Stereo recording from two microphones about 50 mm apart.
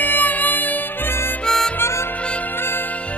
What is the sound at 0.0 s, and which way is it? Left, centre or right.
Music, left.